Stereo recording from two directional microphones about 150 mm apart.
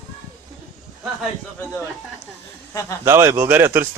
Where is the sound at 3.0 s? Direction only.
15° right (ahead or behind).